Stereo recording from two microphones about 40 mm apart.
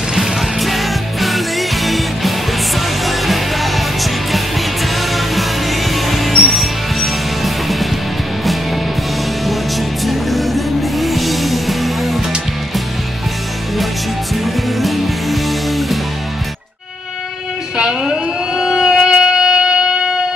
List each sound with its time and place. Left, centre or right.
0.1 s music: centre
10.0 s music: centre
14.3 s music: centre
17.7 s a sound: centre
18.6 s music: centre